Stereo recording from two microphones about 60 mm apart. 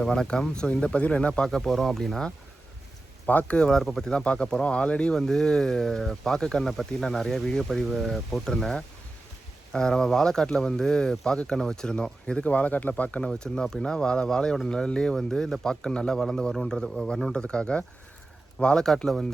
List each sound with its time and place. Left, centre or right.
0.0 s speech: centre
1.5 s speech: centre
3.2 s speech: left
13.3 s speech: centre